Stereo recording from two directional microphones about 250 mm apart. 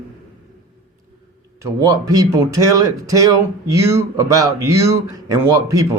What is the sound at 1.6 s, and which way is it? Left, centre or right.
Speech, centre.